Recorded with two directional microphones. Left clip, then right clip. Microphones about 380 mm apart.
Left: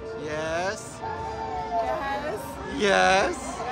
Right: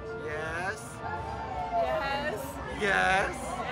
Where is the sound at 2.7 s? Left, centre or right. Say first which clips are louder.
Left 6 dB; centre.